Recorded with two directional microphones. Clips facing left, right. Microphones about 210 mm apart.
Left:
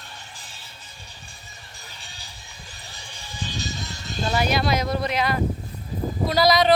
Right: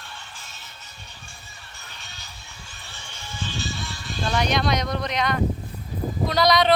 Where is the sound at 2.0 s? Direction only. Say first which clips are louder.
Even; 30° left (ahead or behind).